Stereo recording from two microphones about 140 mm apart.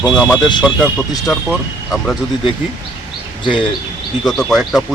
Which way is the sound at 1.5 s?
Centre (ahead or behind).